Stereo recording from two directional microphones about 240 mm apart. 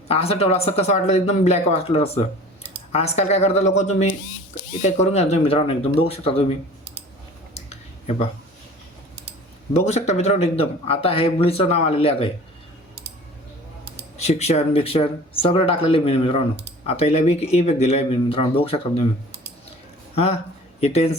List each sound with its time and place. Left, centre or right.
0.1 s a man's voice: left
7.7 s a sound: left
9.7 s a man's voice: left
14.2 s a man's voice: left
20.1 s a man's voice: left